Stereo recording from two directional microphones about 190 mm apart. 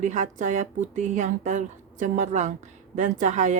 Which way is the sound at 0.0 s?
40° right (ahead or behind).